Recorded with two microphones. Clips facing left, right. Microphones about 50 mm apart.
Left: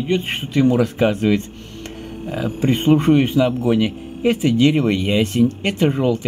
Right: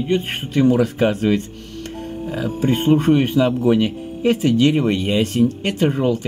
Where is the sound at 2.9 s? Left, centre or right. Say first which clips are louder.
Left 1 dB; left.